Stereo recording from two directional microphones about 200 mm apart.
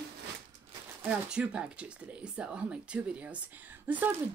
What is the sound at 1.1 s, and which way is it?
Speech, 5° right (ahead or behind).